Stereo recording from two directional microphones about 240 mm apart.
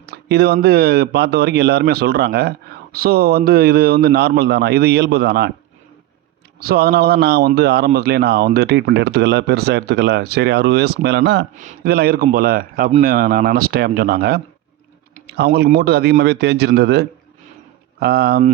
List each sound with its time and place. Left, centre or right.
0.0 s a man's voice: right
6.6 s a man's voice: right
11.5 s a man's voice: right